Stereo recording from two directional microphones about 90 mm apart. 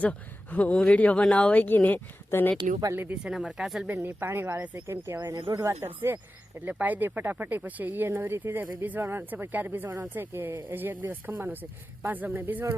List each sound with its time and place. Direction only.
0.0 s speech: 15° left (ahead or behind)
2.9 s speech: 25° right (ahead or behind)
3.2 s speech: 10° right (ahead or behind)
3.9 s speech: 25° right (ahead or behind)